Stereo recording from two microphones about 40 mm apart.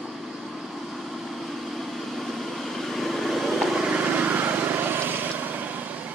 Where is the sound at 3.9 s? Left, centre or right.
Right.